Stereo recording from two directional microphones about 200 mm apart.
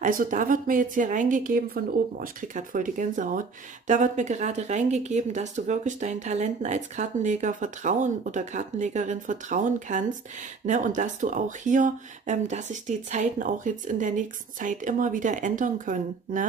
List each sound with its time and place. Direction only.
0.0 s a woman's voice: 40° right (ahead or behind)